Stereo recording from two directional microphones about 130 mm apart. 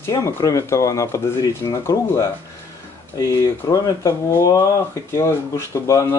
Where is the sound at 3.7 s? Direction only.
25° left (ahead or behind).